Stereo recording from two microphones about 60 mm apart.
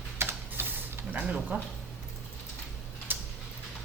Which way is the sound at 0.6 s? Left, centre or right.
Right.